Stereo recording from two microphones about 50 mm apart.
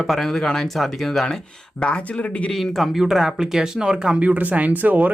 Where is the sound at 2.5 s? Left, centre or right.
Centre; by 5.1 s right.